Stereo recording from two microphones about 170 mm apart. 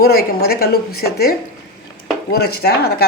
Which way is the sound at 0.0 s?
65° left (ahead or behind).